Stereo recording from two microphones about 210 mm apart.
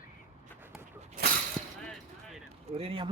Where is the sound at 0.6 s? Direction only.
10° right (ahead or behind).